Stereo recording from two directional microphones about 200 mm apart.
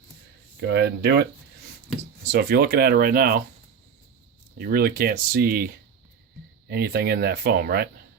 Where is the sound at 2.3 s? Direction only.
50° right (ahead or behind).